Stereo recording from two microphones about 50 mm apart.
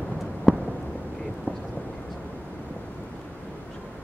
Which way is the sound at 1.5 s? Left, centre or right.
Left.